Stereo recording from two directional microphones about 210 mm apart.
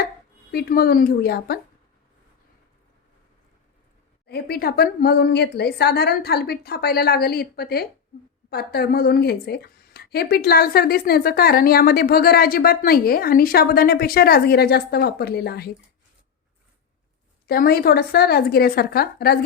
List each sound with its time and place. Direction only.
0.5 s a woman's voice: 45° left (ahead or behind)
4.3 s a woman's voice: 50° left (ahead or behind)
17.4 s a woman's voice: 45° left (ahead or behind)